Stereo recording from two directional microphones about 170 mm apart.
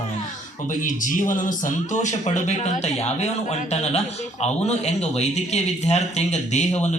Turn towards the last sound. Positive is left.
turn(degrees=40)  # may be behind; listen again after turning